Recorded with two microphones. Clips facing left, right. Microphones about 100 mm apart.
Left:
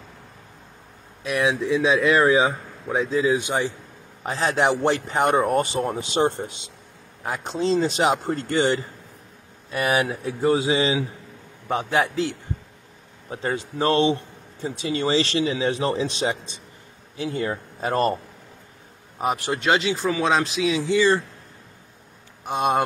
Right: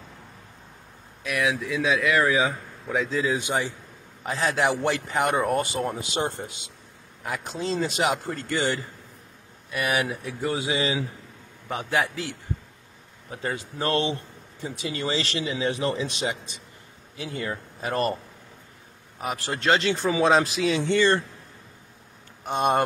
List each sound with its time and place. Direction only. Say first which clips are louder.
1.2 s a man's voice: left 4 dB; 25° left (ahead or behind)
19.9 s speech: right 1 dB; centre (ahead or behind)
22.4 s speech: left 1 dB; centre (ahead or behind)